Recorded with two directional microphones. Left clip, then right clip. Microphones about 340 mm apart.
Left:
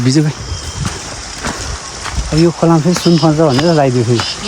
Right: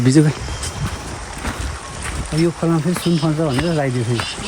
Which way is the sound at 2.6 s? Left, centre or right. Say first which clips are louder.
Left 8 dB; left.